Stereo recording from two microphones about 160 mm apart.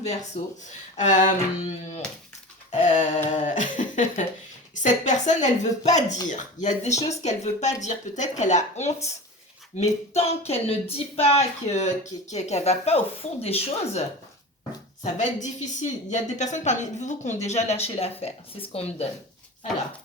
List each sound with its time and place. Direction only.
0.0 s speech: 45° left (ahead or behind)
2.8 s speech: 50° left (ahead or behind)
15.0 s speech: 50° left (ahead or behind)